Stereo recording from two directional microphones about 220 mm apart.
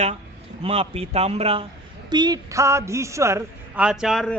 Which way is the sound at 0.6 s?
25° right (ahead or behind).